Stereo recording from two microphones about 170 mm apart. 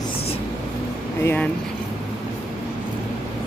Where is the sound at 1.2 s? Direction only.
15° left (ahead or behind).